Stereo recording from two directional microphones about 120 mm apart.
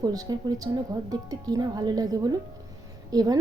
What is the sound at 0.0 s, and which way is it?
A woman's voice, 35° right (ahead or behind).